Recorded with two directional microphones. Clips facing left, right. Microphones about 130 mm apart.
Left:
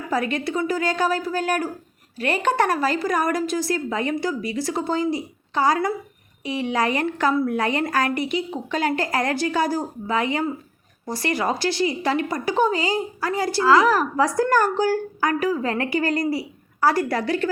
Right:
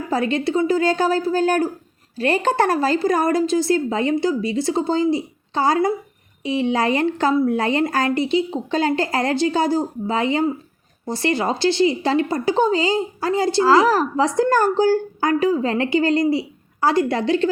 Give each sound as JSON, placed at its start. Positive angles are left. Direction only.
{"t": 0.1, "sound": "speech", "side_deg": -30}